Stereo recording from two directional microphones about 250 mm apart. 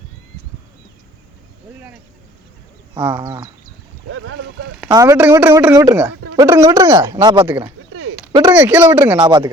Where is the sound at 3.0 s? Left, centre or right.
Centre.